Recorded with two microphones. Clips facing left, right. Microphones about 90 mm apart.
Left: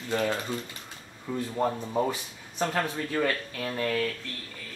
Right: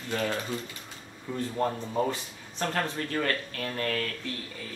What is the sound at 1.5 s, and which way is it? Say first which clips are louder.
Speech: left 1 dB; 10° left (ahead or behind).